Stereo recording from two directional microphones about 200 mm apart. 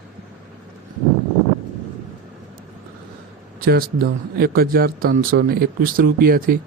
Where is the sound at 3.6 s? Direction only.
50° right (ahead or behind).